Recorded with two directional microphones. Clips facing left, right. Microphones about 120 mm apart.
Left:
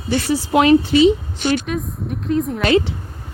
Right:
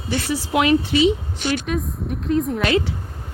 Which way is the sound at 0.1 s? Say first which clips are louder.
Left 4 dB; 35° left (ahead or behind).